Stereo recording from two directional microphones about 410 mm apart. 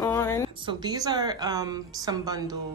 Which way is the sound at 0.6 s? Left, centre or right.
Centre.